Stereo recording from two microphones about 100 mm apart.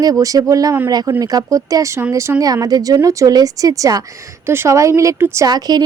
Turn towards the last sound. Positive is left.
turn(degrees=-40)  # may be behind; listen again after turning